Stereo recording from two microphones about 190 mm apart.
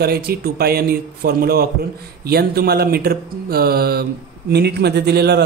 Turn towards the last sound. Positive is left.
turn(degrees=-60)  # may be behind; listen again after turning